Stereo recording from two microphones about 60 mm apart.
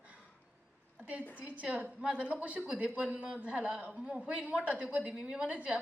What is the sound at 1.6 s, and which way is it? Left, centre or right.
A woman's voice, right.